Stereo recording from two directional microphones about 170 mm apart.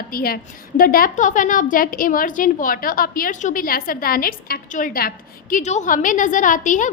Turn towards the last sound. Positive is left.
turn(degrees=50)  # may be behind; listen again after turning